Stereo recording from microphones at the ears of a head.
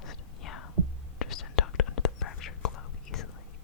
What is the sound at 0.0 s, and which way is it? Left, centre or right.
Whispering, left.